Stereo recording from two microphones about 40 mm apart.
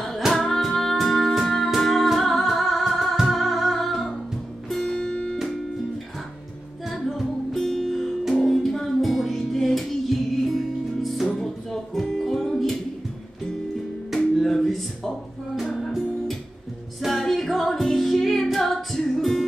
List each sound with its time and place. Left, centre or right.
0.3 s music: centre
6.9 s music: centre
11.2 s music: centre
14.1 s music: centre